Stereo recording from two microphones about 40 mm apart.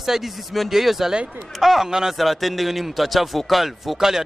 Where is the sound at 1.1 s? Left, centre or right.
Right.